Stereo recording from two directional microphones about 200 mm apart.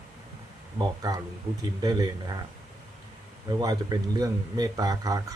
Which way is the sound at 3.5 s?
20° right (ahead or behind).